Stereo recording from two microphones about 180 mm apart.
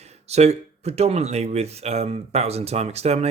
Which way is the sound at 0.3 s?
35° right (ahead or behind).